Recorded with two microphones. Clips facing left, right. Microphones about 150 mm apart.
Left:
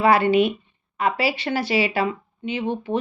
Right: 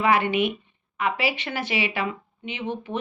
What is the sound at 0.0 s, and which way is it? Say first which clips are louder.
Speech: left 5 dB; 35° left (ahead or behind).